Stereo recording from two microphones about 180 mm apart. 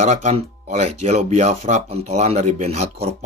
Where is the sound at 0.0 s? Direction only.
40° right (ahead or behind).